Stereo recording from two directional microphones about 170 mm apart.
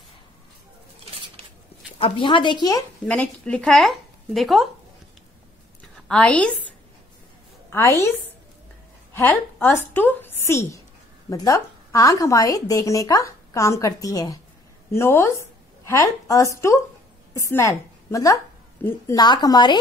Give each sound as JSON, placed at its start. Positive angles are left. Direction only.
{"t": 1.1, "sound": "a sound", "side_deg": -35}
{"t": 2.0, "sound": "a woman's voice", "side_deg": 30}
{"t": 3.1, "sound": "speech", "side_deg": 5}
{"t": 6.0, "sound": "a woman's voice", "side_deg": 5}
{"t": 7.7, "sound": "a woman's voice", "side_deg": 15}
{"t": 9.1, "sound": "a woman's voice", "side_deg": 15}
{"t": 19.1, "sound": "a woman's voice", "side_deg": 25}